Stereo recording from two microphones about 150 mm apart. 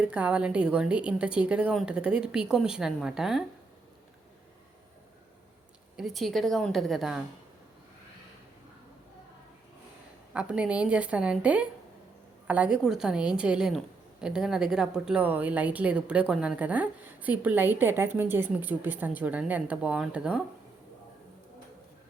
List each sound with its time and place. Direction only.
0.0 s a woman's voice: 5° right (ahead or behind)
6.0 s a woman's voice: centre (ahead or behind)
10.3 s a woman's voice: 5° right (ahead or behind)